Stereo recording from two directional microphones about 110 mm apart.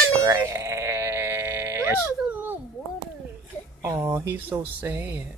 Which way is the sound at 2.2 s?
15° right (ahead or behind).